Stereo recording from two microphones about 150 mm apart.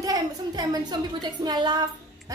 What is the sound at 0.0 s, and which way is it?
A woman's voice, 25° right (ahead or behind).